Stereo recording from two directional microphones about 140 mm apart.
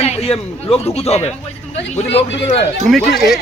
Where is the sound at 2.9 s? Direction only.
Centre (ahead or behind).